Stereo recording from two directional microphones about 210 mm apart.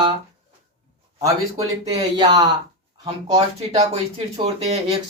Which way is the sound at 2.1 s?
20° right (ahead or behind).